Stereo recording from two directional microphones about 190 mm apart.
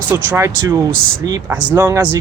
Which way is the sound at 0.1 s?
15° right (ahead or behind).